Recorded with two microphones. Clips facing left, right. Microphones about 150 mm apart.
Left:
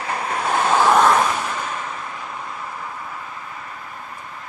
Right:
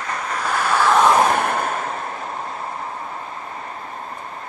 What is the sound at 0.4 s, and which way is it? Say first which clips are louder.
Vehicle: left 2 dB; 25° left (ahead or behind).